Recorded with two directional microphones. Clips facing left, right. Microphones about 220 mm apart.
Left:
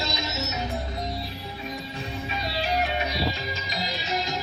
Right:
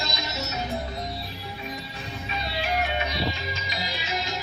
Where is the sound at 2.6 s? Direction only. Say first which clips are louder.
Left 1 dB; 40° left (ahead or behind).